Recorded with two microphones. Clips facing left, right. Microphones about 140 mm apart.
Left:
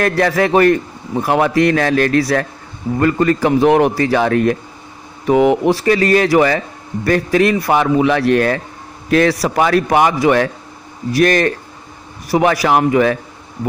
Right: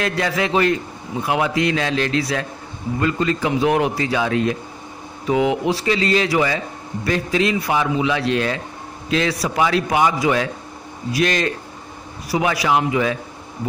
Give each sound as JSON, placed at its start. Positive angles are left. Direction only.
{"t": 0.0, "sound": "a man's voice", "side_deg": 55}
{"t": 9.1, "sound": "a man's voice", "side_deg": 65}